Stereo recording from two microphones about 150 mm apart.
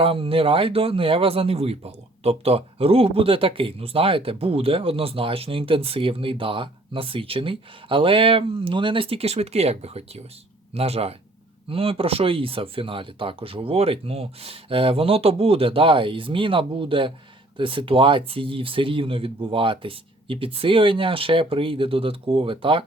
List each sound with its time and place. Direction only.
0.0 s speech: 35° right (ahead or behind)